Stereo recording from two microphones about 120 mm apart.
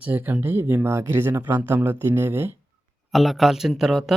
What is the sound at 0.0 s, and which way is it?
Speech, 15° right (ahead or behind).